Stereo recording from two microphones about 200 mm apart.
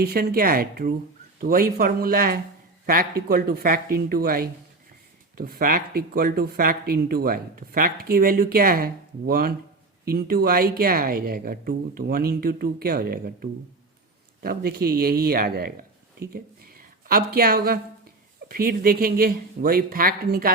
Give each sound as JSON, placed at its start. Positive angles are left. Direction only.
{"t": 0.0, "sound": "speech", "side_deg": -50}
{"t": 16.3, "sound": "a sound", "side_deg": -50}
{"t": 18.4, "sound": "speech", "side_deg": -45}